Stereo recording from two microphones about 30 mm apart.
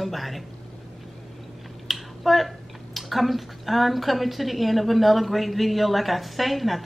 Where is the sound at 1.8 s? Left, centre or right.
Centre.